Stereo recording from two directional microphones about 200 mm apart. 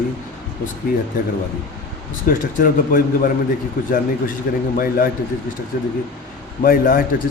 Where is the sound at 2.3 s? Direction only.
45° left (ahead or behind).